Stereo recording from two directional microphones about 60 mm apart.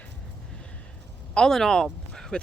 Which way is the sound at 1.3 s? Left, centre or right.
Centre.